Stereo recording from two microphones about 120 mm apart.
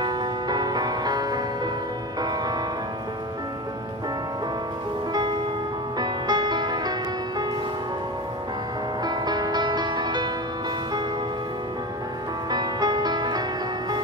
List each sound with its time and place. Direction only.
0.0 s music: 35° right (ahead or behind)
5.1 s music: 35° right (ahead or behind)
9.0 s music: 35° right (ahead or behind)
12.4 s music: 35° right (ahead or behind)